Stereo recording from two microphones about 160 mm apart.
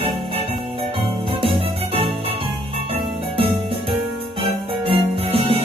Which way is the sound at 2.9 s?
35° right (ahead or behind).